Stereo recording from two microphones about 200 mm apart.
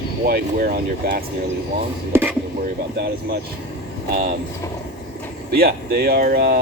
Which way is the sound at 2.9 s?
55° right (ahead or behind).